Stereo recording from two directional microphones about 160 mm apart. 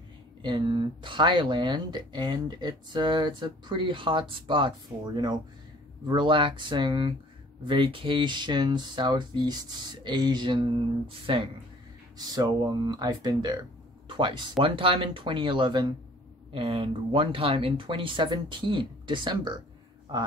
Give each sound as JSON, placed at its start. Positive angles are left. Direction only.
{"t": 0.4, "sound": "speech", "side_deg": -30}